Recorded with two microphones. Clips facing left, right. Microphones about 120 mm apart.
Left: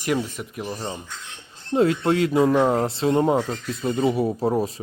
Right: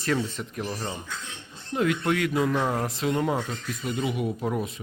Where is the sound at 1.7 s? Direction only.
30° left (ahead or behind).